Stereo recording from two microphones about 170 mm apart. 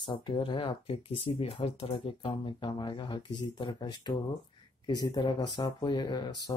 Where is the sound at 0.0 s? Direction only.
30° left (ahead or behind).